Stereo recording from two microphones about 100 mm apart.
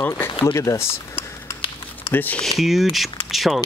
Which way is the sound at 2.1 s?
20° left (ahead or behind).